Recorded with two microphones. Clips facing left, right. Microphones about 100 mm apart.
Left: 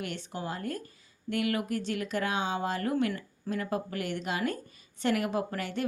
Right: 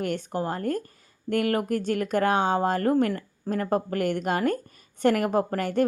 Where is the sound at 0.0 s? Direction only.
45° right (ahead or behind).